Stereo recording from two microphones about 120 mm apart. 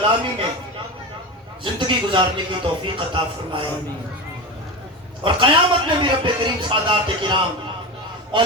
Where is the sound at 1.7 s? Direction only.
40° right (ahead or behind).